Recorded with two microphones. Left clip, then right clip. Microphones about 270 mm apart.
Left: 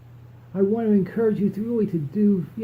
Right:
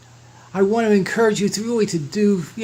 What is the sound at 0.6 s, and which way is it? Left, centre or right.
Speech, centre.